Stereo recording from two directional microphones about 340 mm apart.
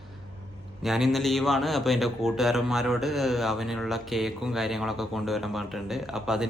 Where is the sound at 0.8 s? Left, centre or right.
Centre.